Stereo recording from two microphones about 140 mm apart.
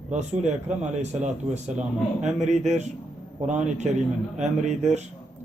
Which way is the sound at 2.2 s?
55° right (ahead or behind).